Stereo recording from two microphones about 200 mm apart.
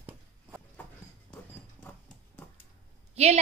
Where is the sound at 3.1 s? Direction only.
30° right (ahead or behind).